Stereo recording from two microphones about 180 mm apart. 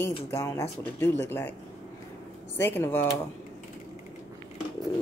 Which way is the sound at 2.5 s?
10° left (ahead or behind).